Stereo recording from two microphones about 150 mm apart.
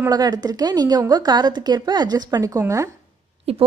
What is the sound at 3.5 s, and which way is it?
Speech, 40° right (ahead or behind).